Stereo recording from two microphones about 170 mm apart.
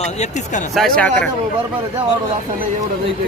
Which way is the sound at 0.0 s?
40° left (ahead or behind).